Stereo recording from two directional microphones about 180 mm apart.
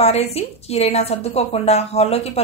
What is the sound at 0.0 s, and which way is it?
A woman's voice, 35° left (ahead or behind).